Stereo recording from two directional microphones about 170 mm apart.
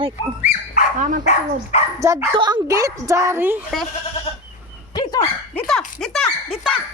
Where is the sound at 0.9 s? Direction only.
50° right (ahead or behind).